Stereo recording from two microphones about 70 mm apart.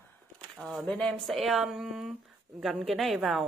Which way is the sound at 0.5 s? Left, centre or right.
Centre.